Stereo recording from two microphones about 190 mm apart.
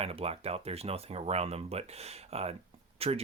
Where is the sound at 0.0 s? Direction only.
30° right (ahead or behind).